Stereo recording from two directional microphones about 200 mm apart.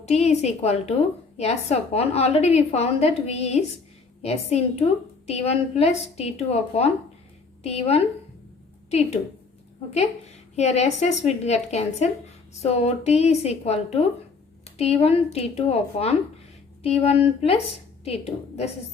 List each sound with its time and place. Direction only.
0.1 s a woman's voice: 35° left (ahead or behind)
10.5 s a woman's voice: 35° left (ahead or behind)